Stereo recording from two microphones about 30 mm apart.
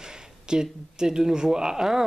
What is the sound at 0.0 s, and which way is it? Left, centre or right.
Speech, right.